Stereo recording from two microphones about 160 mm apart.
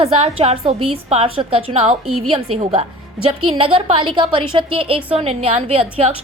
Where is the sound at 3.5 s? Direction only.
35° right (ahead or behind).